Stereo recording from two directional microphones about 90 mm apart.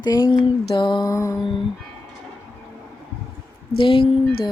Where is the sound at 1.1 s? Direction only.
35° left (ahead or behind).